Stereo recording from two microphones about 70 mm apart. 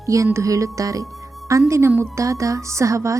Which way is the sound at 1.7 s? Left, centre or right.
Right.